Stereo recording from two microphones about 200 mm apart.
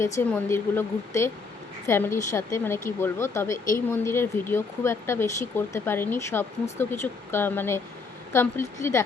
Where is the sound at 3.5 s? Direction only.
40° left (ahead or behind).